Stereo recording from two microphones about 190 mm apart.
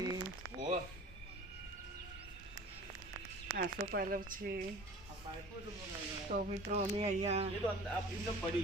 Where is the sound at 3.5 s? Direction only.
55° right (ahead or behind).